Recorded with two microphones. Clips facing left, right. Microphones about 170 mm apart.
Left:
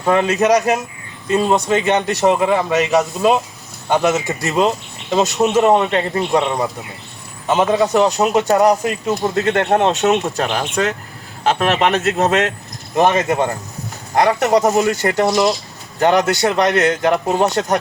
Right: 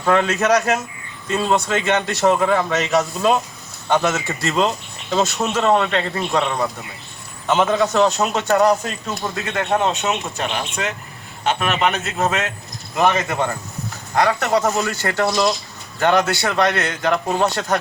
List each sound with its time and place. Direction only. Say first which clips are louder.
0.0 s a man's voice: left 3 dB; 15° left (ahead or behind)
9.0 s speech: left 9 dB; 40° left (ahead or behind)
13.0 s speech: left 4 dB; 20° left (ahead or behind)